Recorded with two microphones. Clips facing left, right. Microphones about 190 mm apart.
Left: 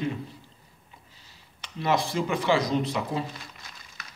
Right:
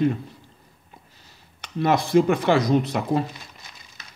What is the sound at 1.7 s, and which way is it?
Speech, 50° right (ahead or behind).